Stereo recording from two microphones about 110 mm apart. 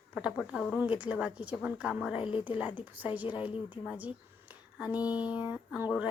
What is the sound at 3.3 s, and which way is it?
Speech, 50° left (ahead or behind).